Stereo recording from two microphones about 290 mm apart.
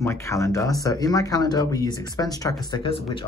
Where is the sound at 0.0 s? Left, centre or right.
Centre.